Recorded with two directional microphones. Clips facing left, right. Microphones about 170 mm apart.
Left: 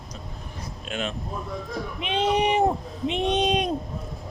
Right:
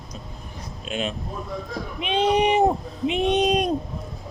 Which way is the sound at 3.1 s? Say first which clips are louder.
Right 3 dB; 5° right (ahead or behind).